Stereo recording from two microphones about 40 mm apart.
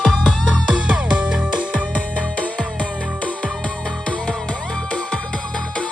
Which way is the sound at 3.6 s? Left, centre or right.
Centre.